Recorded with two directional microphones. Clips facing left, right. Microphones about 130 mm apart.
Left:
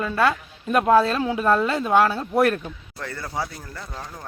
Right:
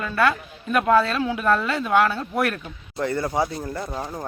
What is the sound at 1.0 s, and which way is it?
A woman's voice, 35° left (ahead or behind).